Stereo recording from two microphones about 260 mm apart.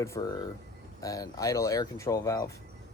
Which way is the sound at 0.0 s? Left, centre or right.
Centre.